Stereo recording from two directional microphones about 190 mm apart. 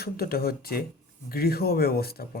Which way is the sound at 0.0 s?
55° left (ahead or behind).